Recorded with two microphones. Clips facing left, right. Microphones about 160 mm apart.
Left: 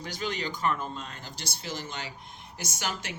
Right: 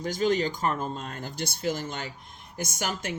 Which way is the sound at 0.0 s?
45° right (ahead or behind).